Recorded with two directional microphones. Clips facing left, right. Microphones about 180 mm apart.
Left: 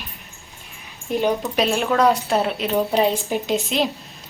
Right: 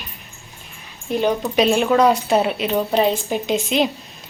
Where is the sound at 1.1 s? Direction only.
5° left (ahead or behind).